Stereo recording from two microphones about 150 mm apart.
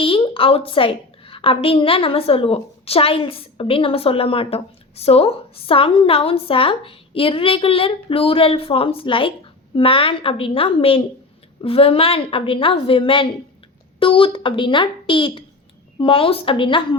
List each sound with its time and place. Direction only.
0.0 s a woman's voice: 35° left (ahead or behind)